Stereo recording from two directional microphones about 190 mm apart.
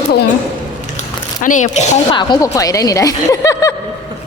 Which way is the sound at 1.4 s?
40° left (ahead or behind).